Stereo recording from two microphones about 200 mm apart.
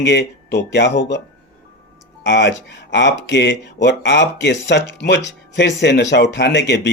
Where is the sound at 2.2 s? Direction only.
65° left (ahead or behind).